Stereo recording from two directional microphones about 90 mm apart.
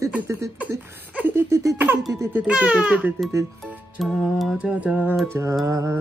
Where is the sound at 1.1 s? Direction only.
20° right (ahead or behind).